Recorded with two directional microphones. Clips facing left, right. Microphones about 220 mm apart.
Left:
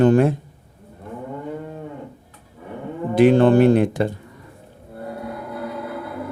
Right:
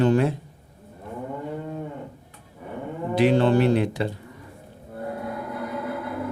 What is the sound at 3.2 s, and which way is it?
Speech, 50° left (ahead or behind).